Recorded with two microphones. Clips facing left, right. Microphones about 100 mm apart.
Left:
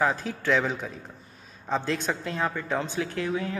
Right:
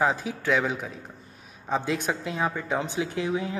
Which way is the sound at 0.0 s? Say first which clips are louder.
Right 1 dB; 15° right (ahead or behind).